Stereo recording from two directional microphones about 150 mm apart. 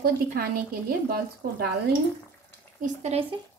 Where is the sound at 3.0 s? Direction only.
45° right (ahead or behind).